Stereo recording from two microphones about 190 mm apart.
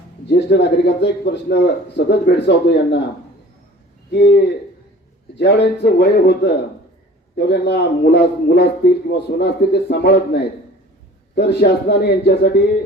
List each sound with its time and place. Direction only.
0.3 s speech: 65° left (ahead or behind)
4.1 s speech: 60° left (ahead or behind)